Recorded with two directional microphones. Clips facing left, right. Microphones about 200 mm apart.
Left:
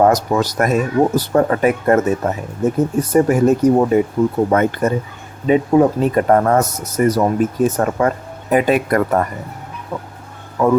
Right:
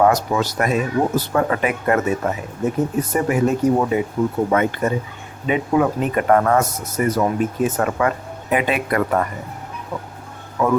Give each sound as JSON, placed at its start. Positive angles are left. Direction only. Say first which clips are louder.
{"t": 0.0, "sound": "speech", "louder": "left 3 dB", "side_deg": 40}
{"t": 10.6, "sound": "speech", "louder": "left 4 dB", "side_deg": 35}